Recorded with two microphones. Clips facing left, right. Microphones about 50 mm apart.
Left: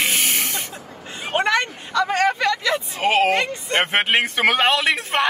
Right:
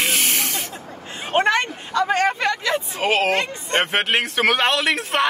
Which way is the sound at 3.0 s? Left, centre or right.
Centre.